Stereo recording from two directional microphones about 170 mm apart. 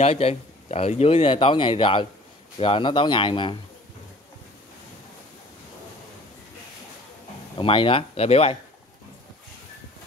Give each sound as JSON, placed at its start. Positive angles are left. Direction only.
{"t": 0.0, "sound": "speech", "side_deg": 35}
{"t": 7.5, "sound": "speech", "side_deg": 30}